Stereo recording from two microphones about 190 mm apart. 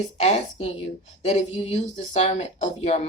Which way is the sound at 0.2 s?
35° left (ahead or behind).